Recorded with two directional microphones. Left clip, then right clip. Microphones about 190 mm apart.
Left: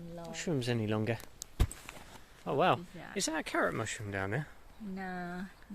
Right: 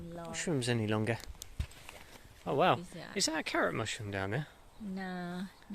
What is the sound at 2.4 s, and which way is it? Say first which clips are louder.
Speech: even; centre (ahead or behind).